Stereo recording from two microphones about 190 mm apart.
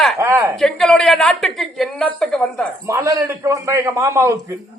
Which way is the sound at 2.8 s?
15° right (ahead or behind).